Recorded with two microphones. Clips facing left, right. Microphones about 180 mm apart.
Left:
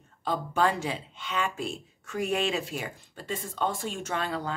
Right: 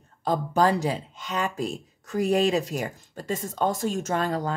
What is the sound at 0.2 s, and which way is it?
Speech, 40° right (ahead or behind).